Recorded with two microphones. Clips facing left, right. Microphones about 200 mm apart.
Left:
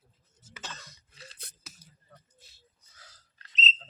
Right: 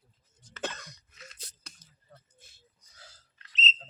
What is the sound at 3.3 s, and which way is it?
Bird, 35° left (ahead or behind).